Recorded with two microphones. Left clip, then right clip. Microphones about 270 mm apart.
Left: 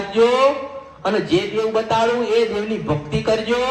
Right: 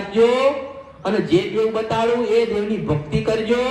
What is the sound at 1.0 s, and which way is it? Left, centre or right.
A man's voice, left.